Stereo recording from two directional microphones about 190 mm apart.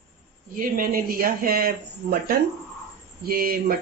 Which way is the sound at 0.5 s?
50° right (ahead or behind).